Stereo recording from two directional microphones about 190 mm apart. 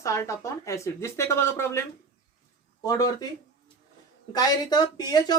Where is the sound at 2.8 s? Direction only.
20° left (ahead or behind).